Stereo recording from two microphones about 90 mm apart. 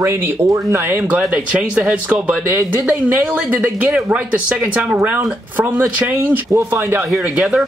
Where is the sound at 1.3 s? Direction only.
15° right (ahead or behind).